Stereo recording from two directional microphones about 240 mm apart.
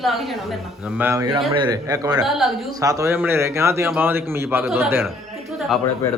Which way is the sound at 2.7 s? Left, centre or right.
Centre.